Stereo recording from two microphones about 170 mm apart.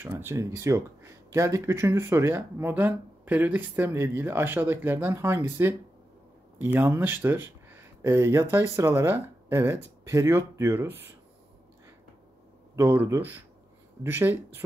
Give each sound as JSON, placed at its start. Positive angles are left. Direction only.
{"t": 0.2, "sound": "speech", "side_deg": -15}
{"t": 12.7, "sound": "speech", "side_deg": -15}